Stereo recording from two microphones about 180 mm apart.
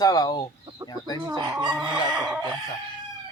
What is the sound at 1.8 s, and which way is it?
Chicken, 5° right (ahead or behind).